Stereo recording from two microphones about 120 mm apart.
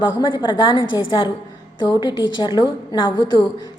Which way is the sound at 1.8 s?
35° left (ahead or behind).